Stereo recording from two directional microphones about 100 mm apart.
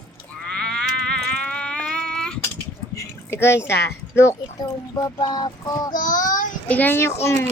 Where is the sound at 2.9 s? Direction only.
25° left (ahead or behind).